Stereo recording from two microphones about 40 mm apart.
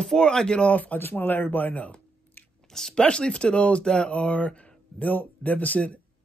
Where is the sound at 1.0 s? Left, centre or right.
Left.